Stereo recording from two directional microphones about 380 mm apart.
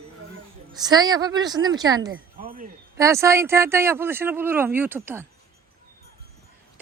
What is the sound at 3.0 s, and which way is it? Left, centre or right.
Speech, centre.